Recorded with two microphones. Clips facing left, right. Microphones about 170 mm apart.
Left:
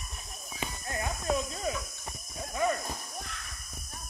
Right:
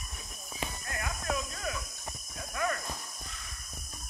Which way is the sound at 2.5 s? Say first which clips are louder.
Left 4 dB; 20° left (ahead or behind).